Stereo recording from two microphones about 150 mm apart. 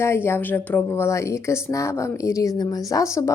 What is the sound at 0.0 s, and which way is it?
A woman's voice, 15° left (ahead or behind).